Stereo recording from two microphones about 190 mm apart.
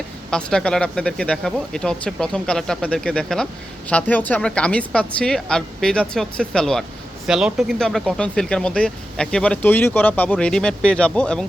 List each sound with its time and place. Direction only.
0.3 s speech: 5° left (ahead or behind)